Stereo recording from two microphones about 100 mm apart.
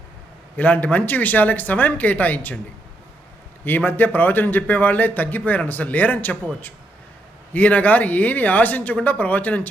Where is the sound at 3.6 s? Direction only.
20° left (ahead or behind).